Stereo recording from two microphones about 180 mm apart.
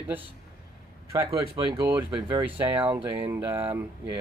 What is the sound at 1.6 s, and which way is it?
Speech, 25° right (ahead or behind).